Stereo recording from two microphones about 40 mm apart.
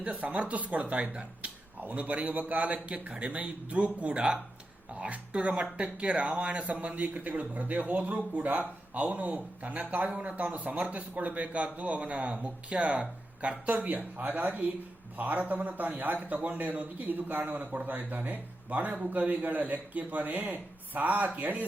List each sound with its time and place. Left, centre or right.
0.0 s a man's voice: right